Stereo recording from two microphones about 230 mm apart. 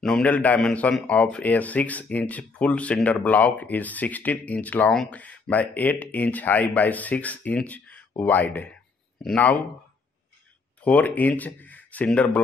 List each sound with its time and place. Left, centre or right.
0.0 s speech: centre
10.8 s speech: centre